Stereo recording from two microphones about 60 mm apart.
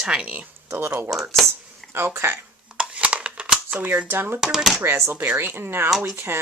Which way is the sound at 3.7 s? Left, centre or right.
Right.